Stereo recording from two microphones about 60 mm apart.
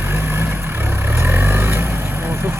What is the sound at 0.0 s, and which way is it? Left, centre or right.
Vehicle, right.